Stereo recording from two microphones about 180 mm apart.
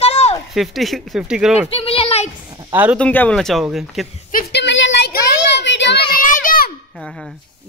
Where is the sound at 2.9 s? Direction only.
10° left (ahead or behind).